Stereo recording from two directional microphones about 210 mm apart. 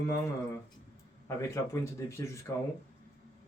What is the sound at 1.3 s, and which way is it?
Speech, 15° left (ahead or behind).